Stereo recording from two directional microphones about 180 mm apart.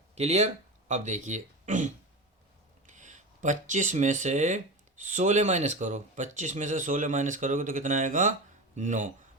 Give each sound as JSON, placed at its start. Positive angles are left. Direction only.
{"t": 0.2, "sound": "speech", "side_deg": -40}